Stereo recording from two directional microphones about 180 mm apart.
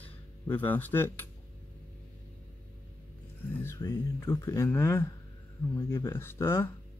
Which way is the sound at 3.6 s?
15° left (ahead or behind).